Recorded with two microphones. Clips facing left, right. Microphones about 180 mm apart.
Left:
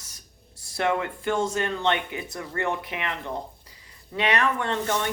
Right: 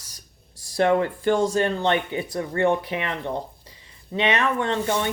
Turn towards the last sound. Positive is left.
turn(degrees=-20)  # may be behind; listen again after turning